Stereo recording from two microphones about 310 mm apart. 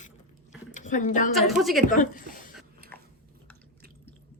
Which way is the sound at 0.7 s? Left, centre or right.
Left.